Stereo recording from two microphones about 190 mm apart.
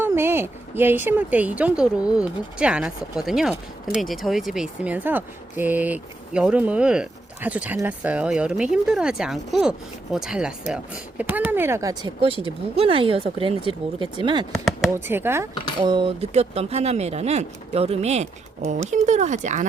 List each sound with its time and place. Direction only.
0.0 s speech: 10° right (ahead or behind)
12.4 s speech: 30° right (ahead or behind)
15.0 s speech: 10° right (ahead or behind)
15.8 s speech: 25° right (ahead or behind)